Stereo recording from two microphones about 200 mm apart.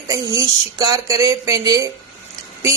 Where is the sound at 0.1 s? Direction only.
15° right (ahead or behind).